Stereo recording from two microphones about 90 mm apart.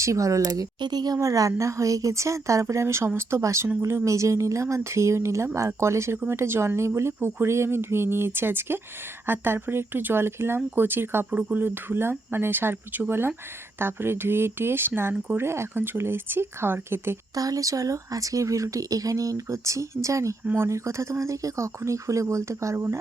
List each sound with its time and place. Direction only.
0.0 s speech: 35° right (ahead or behind)
17.3 s speech: 40° right (ahead or behind)